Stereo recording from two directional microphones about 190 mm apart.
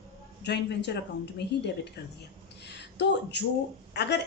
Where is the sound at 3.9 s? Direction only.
65° left (ahead or behind).